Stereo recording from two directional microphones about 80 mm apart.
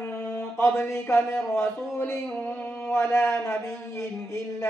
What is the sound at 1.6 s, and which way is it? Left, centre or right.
A man's voice, left.